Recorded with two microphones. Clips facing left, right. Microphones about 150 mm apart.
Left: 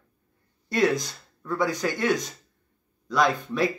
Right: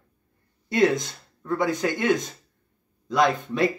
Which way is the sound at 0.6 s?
20° right (ahead or behind).